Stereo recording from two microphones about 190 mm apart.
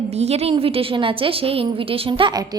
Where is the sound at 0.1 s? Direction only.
35° right (ahead or behind).